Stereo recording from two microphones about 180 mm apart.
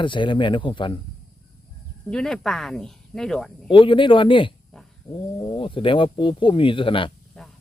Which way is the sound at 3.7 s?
30° left (ahead or behind).